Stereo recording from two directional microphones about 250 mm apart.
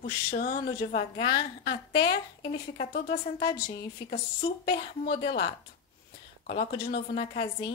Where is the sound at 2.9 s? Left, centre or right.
Left.